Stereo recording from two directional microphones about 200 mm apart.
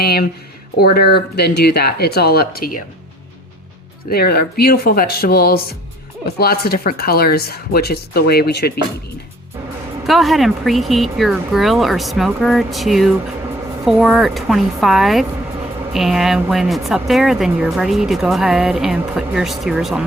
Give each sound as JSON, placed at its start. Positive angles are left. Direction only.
{"t": 0.0, "sound": "speech", "side_deg": 50}
{"t": 4.1, "sound": "speech", "side_deg": 50}
{"t": 10.0, "sound": "speech", "side_deg": 0}